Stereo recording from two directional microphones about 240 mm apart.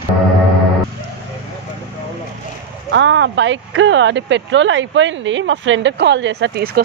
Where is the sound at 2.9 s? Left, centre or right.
Right.